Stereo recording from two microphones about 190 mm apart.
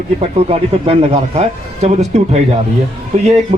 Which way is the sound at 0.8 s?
35° right (ahead or behind).